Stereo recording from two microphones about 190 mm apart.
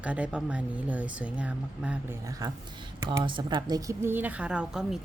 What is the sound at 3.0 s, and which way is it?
A woman's voice, 25° right (ahead or behind).